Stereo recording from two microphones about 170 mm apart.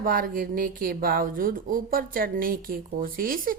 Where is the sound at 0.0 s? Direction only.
55° right (ahead or behind).